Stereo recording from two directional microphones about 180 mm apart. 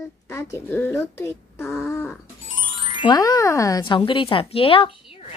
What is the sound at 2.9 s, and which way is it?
Speech, 25° left (ahead or behind).